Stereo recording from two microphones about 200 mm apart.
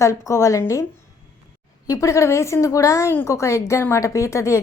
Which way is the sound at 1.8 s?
15° left (ahead or behind).